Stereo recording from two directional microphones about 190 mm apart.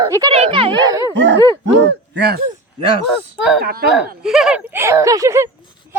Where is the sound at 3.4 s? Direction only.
Centre (ahead or behind).